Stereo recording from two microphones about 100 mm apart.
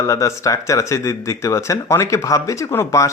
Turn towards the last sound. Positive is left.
turn(degrees=30)  # may be behind; listen again after turning